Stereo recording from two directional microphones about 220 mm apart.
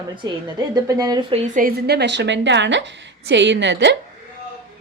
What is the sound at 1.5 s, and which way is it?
A woman's voice, 40° right (ahead or behind).